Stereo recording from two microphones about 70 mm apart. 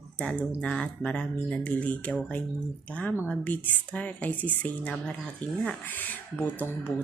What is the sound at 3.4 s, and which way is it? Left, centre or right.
Speech, left.